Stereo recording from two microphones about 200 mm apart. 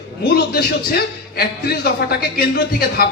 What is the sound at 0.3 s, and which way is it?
A man's voice, 50° left (ahead or behind).